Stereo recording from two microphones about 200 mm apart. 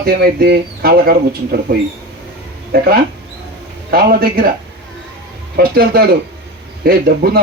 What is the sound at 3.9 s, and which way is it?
Speech, 50° right (ahead or behind).